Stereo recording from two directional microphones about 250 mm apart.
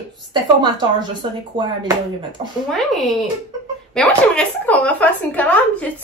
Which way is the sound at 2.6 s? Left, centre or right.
Centre.